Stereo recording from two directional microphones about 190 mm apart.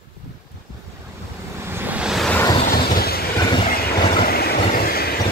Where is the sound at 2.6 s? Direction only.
50° left (ahead or behind).